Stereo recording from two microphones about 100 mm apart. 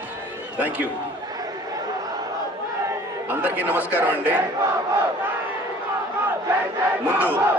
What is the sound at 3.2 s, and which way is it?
A man's voice, 15° right (ahead or behind).